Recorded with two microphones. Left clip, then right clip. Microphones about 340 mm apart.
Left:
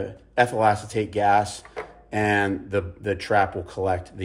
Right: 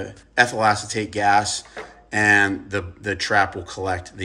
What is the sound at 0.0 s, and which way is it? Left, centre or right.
Speech, centre.